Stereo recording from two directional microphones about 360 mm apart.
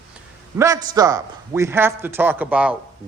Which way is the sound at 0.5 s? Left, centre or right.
Centre.